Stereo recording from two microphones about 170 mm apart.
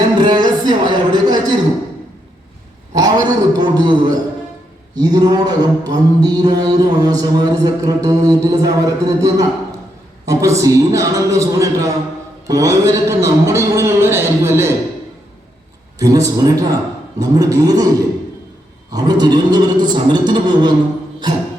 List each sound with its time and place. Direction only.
0.2 s a sound: 25° right (ahead or behind)
2.9 s a man's voice: 20° right (ahead or behind)
4.9 s mantra: 20° right (ahead or behind)
12.5 s a man's voice: 20° right (ahead or behind)
16.0 s mantra: 20° right (ahead or behind)
18.9 s mantra: 25° right (ahead or behind)